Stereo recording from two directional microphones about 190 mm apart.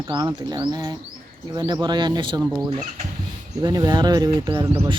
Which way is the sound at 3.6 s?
20° right (ahead or behind).